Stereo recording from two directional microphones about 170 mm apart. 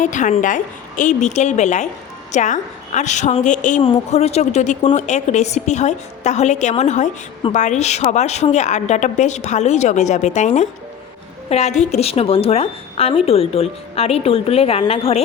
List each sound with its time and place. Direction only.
0.0 s a woman's voice: 45° left (ahead or behind)